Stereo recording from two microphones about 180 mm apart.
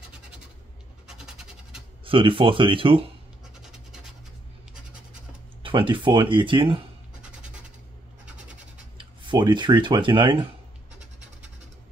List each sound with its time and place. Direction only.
1.0 s a sound: 5° right (ahead or behind)
2.0 s speech: 30° right (ahead or behind)
3.6 s scratch: 5° right (ahead or behind)
5.6 s speech: 30° right (ahead or behind)
8.9 s speech: 25° right (ahead or behind)